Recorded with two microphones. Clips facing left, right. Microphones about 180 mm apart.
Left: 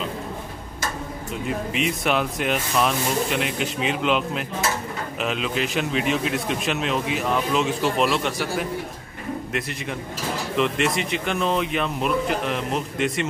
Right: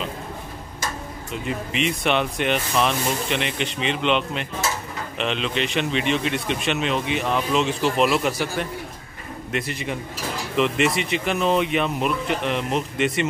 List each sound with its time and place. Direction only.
1.4 s a man's voice: centre (ahead or behind)